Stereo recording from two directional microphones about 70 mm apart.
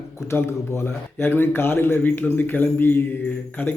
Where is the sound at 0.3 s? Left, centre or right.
Left.